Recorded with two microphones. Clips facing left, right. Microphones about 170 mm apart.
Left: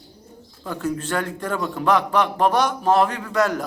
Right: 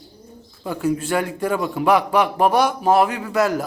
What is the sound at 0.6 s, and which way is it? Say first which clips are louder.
A man's voice: right 4 dB; 10° right (ahead or behind).